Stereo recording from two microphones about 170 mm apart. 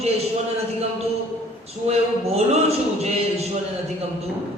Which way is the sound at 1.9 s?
35° right (ahead or behind).